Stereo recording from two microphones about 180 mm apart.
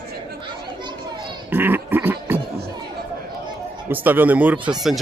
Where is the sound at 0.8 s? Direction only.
25° right (ahead or behind).